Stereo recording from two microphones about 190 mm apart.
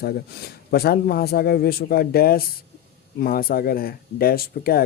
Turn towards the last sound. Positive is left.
turn(degrees=50)  # may be behind; listen again after turning